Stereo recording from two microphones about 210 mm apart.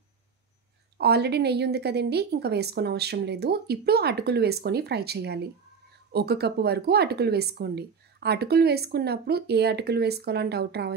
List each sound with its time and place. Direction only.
0.9 s speech: 50° right (ahead or behind)